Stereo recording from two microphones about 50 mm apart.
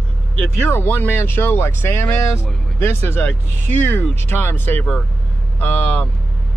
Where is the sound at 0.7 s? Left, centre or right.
Left.